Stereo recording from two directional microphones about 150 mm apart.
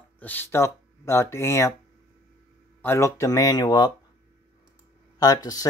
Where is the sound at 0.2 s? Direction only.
10° left (ahead or behind).